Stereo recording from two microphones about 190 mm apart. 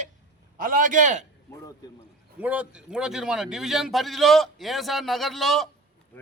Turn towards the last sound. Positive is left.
turn(degrees=0)  # may be behind; listen again after turning